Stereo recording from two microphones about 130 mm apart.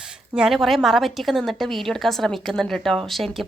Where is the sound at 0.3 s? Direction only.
5° right (ahead or behind).